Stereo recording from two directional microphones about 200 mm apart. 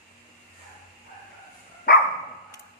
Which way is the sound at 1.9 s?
50° left (ahead or behind).